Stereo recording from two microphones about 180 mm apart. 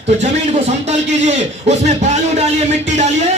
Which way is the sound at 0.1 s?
40° right (ahead or behind).